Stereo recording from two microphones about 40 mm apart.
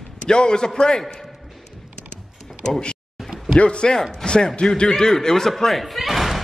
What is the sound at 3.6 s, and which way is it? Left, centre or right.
A man's voice, left.